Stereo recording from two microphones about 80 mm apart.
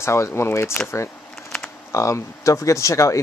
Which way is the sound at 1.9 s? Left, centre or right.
Left.